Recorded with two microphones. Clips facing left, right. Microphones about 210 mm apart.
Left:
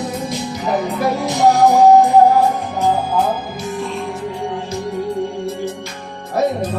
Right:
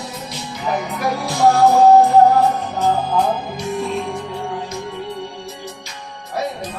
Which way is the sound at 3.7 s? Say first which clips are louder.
Right 2 dB; centre (ahead or behind).